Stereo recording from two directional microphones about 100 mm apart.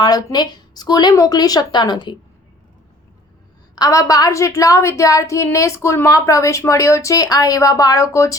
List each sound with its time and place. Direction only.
0.0 s a woman's voice: 40° left (ahead or behind)
3.8 s a woman's voice: 35° left (ahead or behind)